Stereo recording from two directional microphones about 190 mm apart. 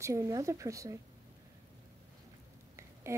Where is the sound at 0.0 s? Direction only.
15° right (ahead or behind).